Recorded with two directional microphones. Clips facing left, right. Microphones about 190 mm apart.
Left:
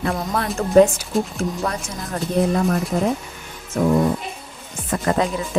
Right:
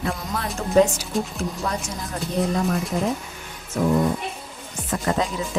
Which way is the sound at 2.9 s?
60° left (ahead or behind).